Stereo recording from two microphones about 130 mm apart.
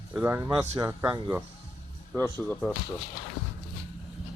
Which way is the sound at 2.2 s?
15° left (ahead or behind).